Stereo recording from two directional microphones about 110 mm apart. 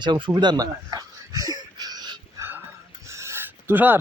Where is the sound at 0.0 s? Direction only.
45° right (ahead or behind).